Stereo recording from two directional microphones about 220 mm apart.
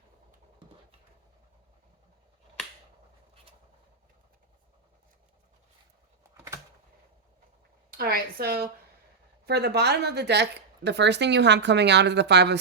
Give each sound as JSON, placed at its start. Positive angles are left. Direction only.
{"t": 7.9, "sound": "a woman's voice", "side_deg": -45}